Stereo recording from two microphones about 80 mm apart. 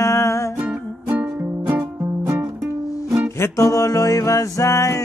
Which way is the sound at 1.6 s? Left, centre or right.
Right.